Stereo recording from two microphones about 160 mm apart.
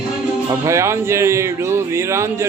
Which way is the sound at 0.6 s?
15° right (ahead or behind).